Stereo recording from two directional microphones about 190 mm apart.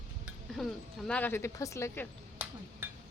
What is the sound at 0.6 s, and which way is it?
Speech, centre (ahead or behind).